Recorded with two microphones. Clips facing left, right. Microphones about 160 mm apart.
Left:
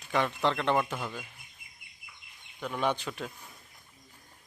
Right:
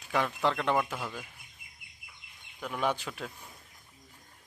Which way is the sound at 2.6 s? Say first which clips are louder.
Left 1 dB; 5° right (ahead or behind).